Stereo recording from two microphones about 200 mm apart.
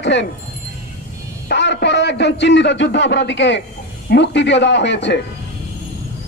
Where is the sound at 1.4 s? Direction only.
60° left (ahead or behind).